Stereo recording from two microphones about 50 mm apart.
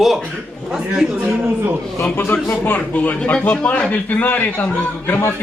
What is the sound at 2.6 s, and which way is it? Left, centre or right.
Speech, left.